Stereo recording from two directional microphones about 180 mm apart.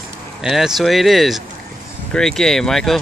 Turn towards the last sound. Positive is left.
turn(degrees=0)  # may be behind; listen again after turning